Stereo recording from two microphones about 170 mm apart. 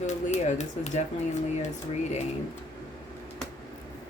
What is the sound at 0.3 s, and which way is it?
Speech, 45° left (ahead or behind).